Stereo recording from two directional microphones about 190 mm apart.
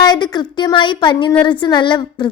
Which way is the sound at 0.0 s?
25° left (ahead or behind).